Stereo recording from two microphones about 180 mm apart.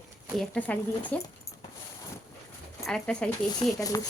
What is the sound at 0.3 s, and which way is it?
Speech, 5° left (ahead or behind).